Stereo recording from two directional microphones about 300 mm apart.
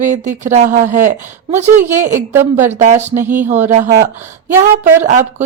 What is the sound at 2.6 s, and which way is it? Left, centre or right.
Speech, right.